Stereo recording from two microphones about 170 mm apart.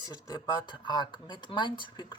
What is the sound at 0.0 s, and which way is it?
Speech, 25° left (ahead or behind).